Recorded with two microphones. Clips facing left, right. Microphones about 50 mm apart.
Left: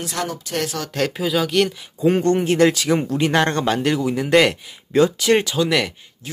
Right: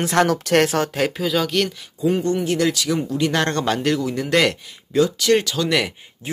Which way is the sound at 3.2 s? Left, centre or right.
Centre.